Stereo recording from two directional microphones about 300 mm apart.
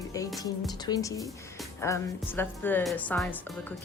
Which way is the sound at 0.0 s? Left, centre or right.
Centre.